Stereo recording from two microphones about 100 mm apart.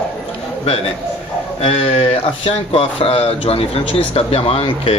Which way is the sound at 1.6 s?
80° left.